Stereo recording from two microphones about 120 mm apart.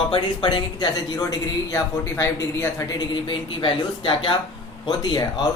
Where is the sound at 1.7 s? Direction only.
25° left (ahead or behind).